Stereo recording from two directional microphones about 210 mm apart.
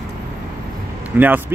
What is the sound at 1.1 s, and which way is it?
Speech, 10° right (ahead or behind).